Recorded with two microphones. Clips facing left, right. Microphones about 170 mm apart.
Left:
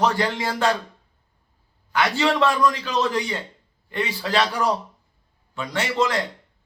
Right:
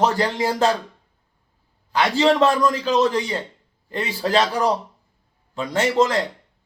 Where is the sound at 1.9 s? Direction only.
35° right (ahead or behind).